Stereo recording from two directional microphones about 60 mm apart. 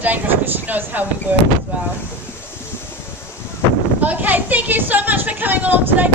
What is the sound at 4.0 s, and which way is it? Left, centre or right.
Speech, right.